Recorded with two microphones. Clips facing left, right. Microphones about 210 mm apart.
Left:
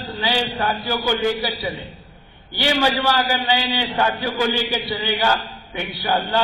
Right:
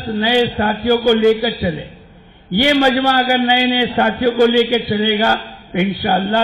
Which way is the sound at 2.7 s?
45° right (ahead or behind).